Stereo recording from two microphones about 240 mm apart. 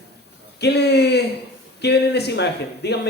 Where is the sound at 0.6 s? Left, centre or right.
Left.